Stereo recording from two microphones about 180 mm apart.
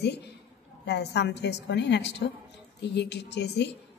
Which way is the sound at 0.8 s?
70° left (ahead or behind).